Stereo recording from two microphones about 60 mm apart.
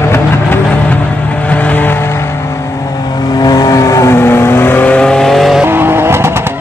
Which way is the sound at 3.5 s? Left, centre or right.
Left.